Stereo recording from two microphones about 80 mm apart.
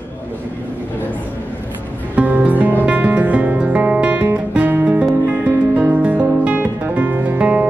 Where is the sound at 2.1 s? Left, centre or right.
Centre.